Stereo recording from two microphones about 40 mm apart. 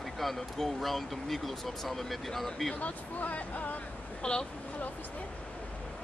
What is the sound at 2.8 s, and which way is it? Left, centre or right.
Speech, left.